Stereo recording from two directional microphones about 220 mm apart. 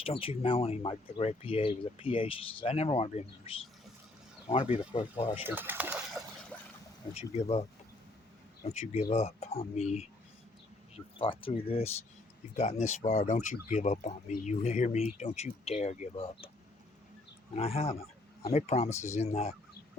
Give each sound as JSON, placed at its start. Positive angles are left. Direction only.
{"t": 0.0, "sound": "speech", "side_deg": 25}
{"t": 5.4, "sound": "speech", "side_deg": -10}
{"t": 7.1, "sound": "speech", "side_deg": 30}
{"t": 8.7, "sound": "speech", "side_deg": 30}
{"t": 17.5, "sound": "speech", "side_deg": 25}